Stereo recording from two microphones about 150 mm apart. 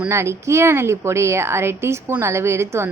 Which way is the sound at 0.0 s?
20° right (ahead or behind).